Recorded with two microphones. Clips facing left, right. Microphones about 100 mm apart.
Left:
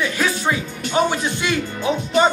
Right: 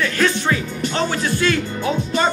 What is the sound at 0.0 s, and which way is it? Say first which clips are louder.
Speech: right 2 dB; 15° left (ahead or behind).